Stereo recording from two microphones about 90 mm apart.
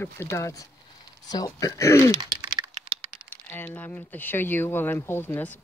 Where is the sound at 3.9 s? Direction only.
20° left (ahead or behind).